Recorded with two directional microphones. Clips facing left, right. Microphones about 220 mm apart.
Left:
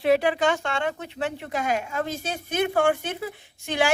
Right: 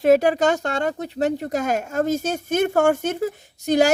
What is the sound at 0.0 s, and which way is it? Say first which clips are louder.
A woman's voice: right 5 dB; 45° right (ahead or behind).